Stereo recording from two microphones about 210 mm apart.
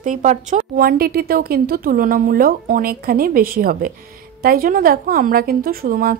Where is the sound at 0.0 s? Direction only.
35° right (ahead or behind).